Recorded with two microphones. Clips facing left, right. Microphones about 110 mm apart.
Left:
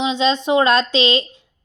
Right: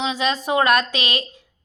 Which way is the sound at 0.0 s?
25° left (ahead or behind).